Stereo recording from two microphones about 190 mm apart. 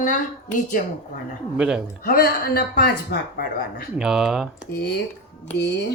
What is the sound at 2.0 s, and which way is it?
Speech, 55° left (ahead or behind).